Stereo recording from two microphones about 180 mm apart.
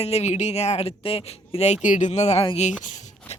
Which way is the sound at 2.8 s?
40° left (ahead or behind).